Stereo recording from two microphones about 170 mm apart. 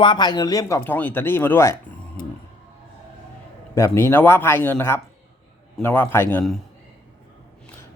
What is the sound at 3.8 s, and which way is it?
Speech, 15° left (ahead or behind).